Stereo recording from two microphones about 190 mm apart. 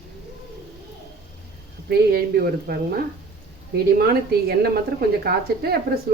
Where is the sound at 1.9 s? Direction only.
55° right (ahead or behind).